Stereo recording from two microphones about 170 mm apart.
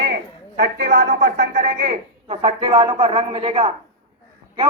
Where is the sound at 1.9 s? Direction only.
35° right (ahead or behind).